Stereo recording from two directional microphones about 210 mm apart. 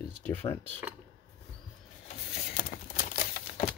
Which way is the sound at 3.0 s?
40° left (ahead or behind).